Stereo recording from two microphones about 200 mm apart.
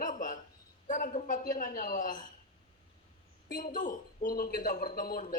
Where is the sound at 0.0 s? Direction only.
40° left (ahead or behind).